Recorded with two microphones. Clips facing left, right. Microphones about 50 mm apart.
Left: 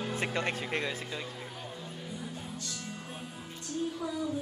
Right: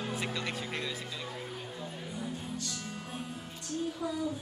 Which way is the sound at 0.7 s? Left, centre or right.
Left.